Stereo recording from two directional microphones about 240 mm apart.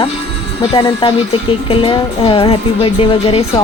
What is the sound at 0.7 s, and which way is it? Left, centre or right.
Speech, left.